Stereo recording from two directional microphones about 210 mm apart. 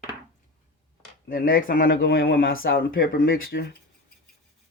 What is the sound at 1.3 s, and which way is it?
Speech, 45° left (ahead or behind).